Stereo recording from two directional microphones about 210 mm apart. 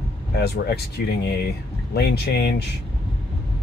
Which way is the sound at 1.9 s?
50° left (ahead or behind).